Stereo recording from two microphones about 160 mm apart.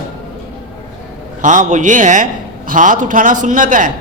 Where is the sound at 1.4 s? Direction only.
50° right (ahead or behind).